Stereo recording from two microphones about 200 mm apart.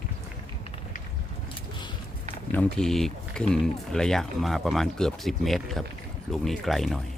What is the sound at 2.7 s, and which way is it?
Speech, centre (ahead or behind).